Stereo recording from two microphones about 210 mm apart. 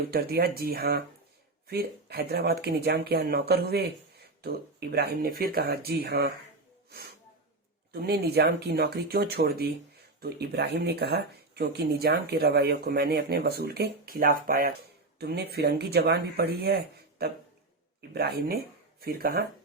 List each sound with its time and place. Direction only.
0.1 s speech: 45° right (ahead or behind)
7.9 s speech: 50° right (ahead or behind)
18.1 s speech: 50° right (ahead or behind)